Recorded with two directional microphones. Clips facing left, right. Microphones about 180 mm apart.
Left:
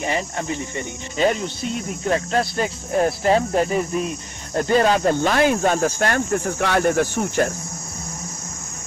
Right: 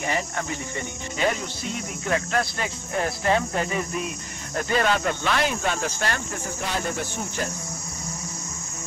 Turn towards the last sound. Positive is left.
turn(degrees=75)  # may be behind; listen again after turning